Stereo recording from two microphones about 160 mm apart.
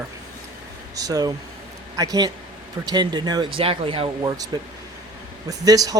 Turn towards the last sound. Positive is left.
turn(degrees=-20)  # may be behind; listen again after turning